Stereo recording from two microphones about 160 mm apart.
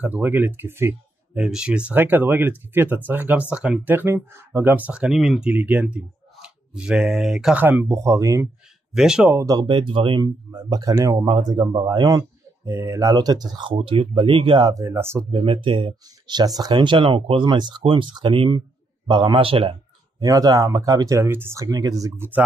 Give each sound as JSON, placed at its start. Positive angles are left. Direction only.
{"t": 0.0, "sound": "speech", "side_deg": -10}
{"t": 8.9, "sound": "speech", "side_deg": -5}
{"t": 9.4, "sound": "speech", "side_deg": -25}
{"t": 14.8, "sound": "speech", "side_deg": -15}
{"t": 15.3, "sound": "speech", "side_deg": -35}
{"t": 20.2, "sound": "speech", "side_deg": -25}